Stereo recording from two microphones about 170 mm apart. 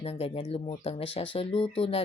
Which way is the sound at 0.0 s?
35° left (ahead or behind).